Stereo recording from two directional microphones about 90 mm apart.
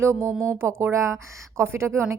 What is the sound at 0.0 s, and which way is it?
A woman's voice, 30° right (ahead or behind).